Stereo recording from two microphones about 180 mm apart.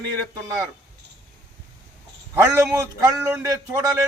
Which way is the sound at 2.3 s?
20° right (ahead or behind).